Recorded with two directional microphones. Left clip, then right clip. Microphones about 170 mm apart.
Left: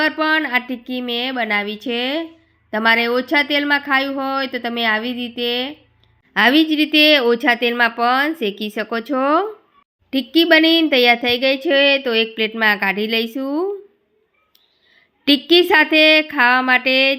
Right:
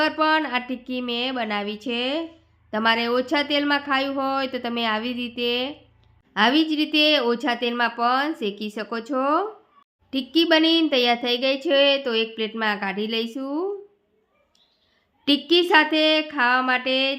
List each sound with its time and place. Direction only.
0.0 s speech: 10° left (ahead or behind)
6.3 s a woman's voice: 20° left (ahead or behind)
15.2 s a woman's voice: 20° left (ahead or behind)